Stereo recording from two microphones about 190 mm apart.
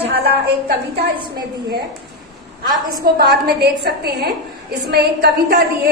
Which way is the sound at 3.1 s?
60° right (ahead or behind).